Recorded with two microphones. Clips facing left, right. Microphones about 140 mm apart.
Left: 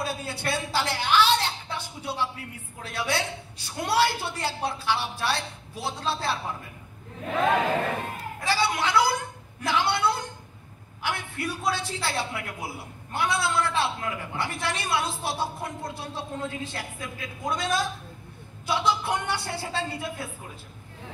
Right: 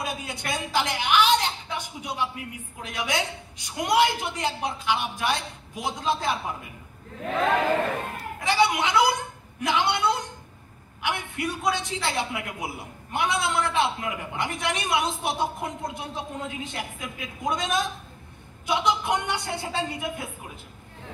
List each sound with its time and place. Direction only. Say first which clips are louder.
0.0 s a man's voice: left 2 dB; 15° right (ahead or behind)
8.5 s a man's voice: right 3 dB; 20° right (ahead or behind)